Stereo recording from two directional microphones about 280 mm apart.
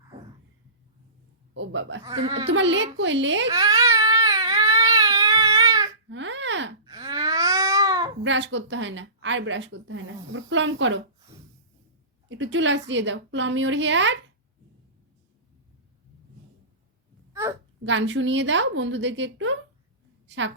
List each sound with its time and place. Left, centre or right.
1.5 s speech: right
2.0 s speech: centre
2.5 s speech: right
3.5 s baby cry: centre
6.1 s babbling: right
6.8 s babbling: centre
8.2 s speech: right
12.3 s speech: right
17.8 s speech: right
20.2 s a sound: right